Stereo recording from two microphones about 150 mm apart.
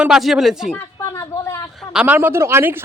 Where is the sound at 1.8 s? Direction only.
5° right (ahead or behind).